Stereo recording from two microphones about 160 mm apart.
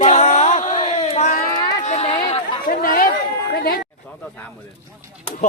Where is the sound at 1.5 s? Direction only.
25° left (ahead or behind).